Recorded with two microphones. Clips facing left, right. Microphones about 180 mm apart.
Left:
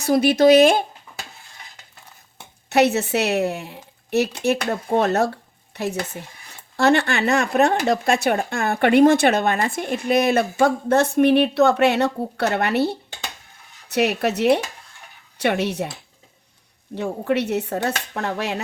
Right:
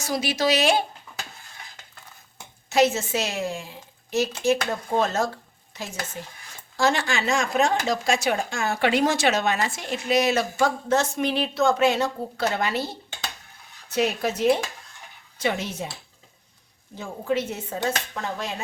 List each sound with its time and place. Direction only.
0.0 s speech: 55° left (ahead or behind)
2.6 s speech: 65° left (ahead or behind)
16.9 s speech: 70° left (ahead or behind)